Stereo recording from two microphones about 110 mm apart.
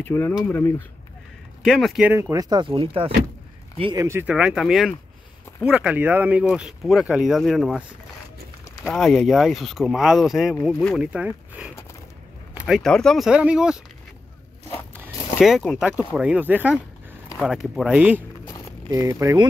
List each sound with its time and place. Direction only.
0.0 s speech: 20° left (ahead or behind)
1.6 s speech: centre (ahead or behind)
2.1 s speech: 25° right (ahead or behind)
2.5 s speech: 55° right (ahead or behind)
3.9 s speech: 25° right (ahead or behind)
4.3 s speech: 10° right (ahead or behind)
8.8 s speech: 5° left (ahead or behind)
11.0 s speech: 10° right (ahead or behind); by 13.3 s 5° left (ahead or behind)
13.3 s speech: 10° right (ahead or behind)
15.3 s speech: centre (ahead or behind)
17.4 s speech: centre (ahead or behind)
18.9 s speech: 30° right (ahead or behind)